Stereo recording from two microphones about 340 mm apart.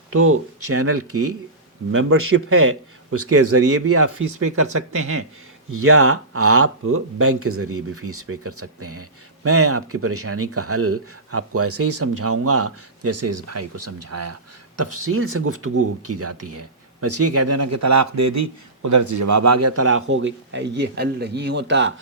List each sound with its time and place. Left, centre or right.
0.1 s speech: right